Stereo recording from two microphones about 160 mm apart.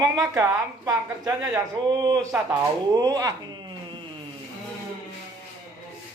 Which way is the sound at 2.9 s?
25° right (ahead or behind).